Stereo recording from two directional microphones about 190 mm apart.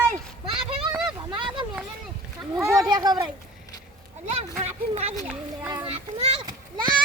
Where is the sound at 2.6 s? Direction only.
15° right (ahead or behind).